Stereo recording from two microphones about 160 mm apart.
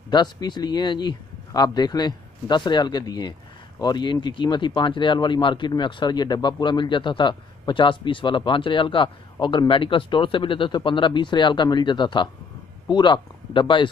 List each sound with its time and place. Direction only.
0.1 s speech: 25° left (ahead or behind)